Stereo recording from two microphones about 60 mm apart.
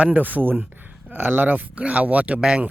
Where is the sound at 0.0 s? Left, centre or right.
Right.